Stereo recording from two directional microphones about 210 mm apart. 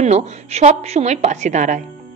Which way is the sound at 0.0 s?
30° right (ahead or behind).